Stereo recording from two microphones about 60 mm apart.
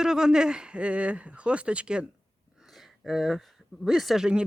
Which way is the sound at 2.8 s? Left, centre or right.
Centre.